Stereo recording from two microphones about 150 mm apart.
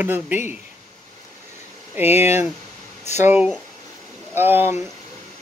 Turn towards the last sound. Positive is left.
turn(degrees=-15)  # may be behind; listen again after turning